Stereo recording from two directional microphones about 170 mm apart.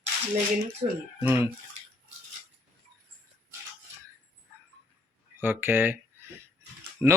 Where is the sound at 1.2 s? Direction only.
15° right (ahead or behind).